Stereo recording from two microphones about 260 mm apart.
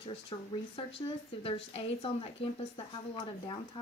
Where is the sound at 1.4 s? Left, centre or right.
Left.